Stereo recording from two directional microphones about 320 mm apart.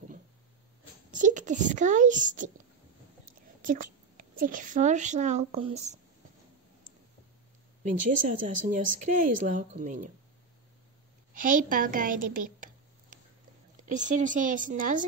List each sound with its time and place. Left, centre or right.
1.1 s speech: right
3.6 s a woman's voice: right
7.8 s speech: right
11.3 s speech: right
12.5 s a sound: right
13.9 s speech: right